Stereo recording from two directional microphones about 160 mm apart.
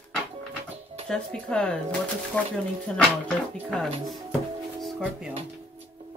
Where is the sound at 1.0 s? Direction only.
5° left (ahead or behind).